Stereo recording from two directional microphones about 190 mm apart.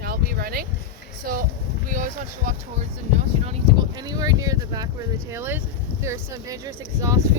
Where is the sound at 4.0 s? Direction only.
20° right (ahead or behind).